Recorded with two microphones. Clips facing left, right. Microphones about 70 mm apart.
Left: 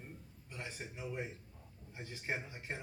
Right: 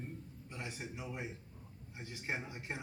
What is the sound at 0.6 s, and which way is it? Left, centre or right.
Speech, centre.